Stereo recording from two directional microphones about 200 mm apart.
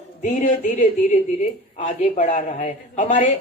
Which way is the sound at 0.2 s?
40° left (ahead or behind).